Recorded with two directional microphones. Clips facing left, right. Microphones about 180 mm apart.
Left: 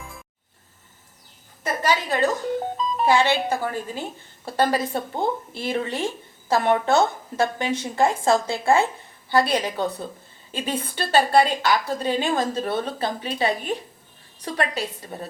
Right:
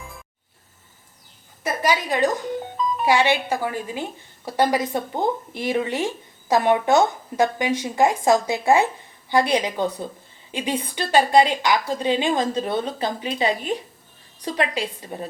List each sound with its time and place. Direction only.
1.6 s a woman's voice: 15° right (ahead or behind)